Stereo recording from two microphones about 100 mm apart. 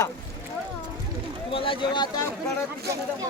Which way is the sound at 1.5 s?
60° left (ahead or behind).